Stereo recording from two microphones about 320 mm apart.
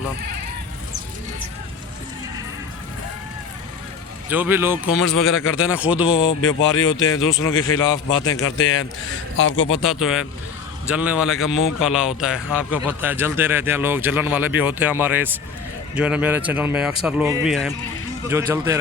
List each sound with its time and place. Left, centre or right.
4.3 s a man's voice: centre
5.3 s a man's voice: left
5.5 s a man's voice: centre
6.4 s a man's voice: left
9.8 s a man's voice: centre